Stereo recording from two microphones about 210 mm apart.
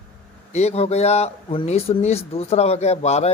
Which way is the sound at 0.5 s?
30° left (ahead or behind).